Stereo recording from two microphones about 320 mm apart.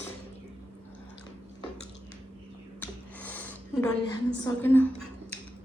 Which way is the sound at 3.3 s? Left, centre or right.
Centre.